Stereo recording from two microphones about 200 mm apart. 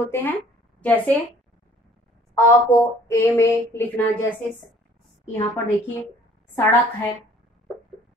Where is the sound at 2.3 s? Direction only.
15° left (ahead or behind).